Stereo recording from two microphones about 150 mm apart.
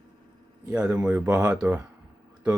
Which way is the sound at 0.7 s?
5° right (ahead or behind).